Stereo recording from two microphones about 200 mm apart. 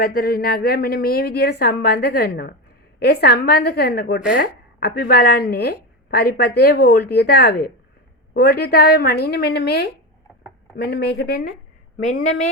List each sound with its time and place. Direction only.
0.0 s speech: 50° left (ahead or behind)